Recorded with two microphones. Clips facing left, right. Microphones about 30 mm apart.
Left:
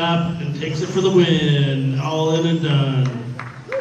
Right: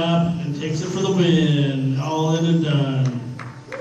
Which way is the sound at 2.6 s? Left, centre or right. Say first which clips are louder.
Left 1 dB; left.